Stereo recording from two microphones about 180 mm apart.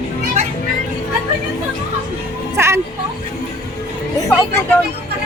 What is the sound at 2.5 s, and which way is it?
Music, 15° right (ahead or behind).